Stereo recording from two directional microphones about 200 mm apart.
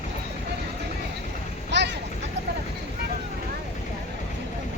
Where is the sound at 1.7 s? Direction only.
60° right (ahead or behind).